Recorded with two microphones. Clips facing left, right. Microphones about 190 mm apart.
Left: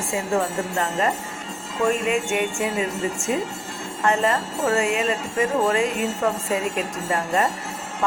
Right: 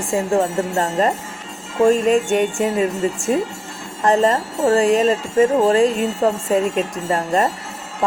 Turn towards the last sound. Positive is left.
turn(degrees=-35)  # may be behind; listen again after turning